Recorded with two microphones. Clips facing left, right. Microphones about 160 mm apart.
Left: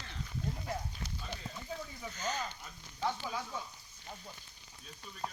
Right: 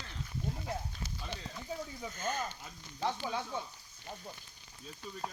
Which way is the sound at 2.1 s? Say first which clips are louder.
Right 1 dB; 50° right (ahead or behind).